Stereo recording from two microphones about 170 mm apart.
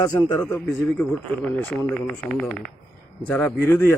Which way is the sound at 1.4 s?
10° left (ahead or behind).